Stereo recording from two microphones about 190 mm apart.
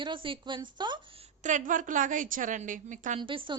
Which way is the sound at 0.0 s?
25° right (ahead or behind).